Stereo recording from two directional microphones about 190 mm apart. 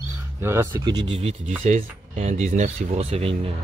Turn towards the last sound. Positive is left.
turn(degrees=-30)  # may be behind; listen again after turning